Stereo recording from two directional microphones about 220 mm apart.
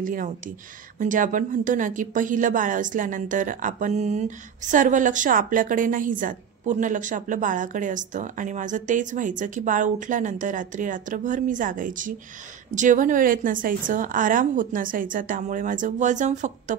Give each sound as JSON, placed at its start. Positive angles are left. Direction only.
{"t": 0.0, "sound": "a woman's voice", "side_deg": -35}